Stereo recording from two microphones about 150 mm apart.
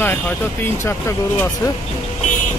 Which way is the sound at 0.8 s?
15° left (ahead or behind).